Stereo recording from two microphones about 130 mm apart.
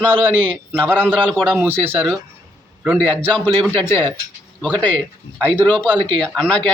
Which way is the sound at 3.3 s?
10° left (ahead or behind).